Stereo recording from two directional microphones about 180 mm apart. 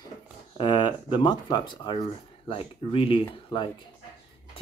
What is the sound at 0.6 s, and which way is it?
Speech, 25° left (ahead or behind).